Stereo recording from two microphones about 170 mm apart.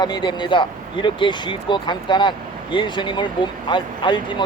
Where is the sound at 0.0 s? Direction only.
25° left (ahead or behind).